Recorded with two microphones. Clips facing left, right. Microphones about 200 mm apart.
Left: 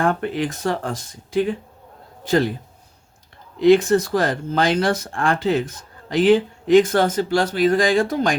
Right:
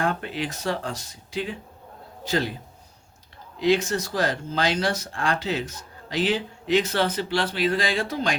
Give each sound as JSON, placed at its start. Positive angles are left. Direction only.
{"t": 0.0, "sound": "speech", "side_deg": 50}
{"t": 3.6, "sound": "speech", "side_deg": 55}